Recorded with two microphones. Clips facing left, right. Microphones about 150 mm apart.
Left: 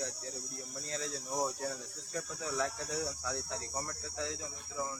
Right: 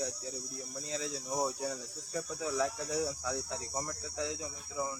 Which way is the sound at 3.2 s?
5° right (ahead or behind).